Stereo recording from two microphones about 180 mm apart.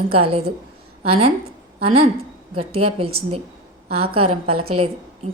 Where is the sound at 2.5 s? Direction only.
30° right (ahead or behind).